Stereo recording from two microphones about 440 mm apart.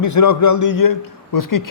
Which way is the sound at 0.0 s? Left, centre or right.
Left.